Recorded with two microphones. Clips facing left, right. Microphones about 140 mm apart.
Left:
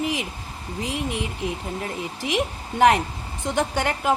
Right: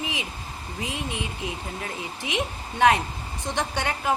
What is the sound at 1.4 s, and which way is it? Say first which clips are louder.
Speech: left 4 dB; 40° left (ahead or behind).